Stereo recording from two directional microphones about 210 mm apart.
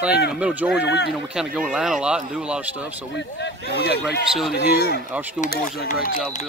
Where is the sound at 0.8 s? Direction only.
55° left (ahead or behind).